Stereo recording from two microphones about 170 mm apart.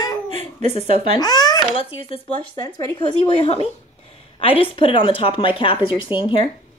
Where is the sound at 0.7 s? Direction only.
35° left (ahead or behind).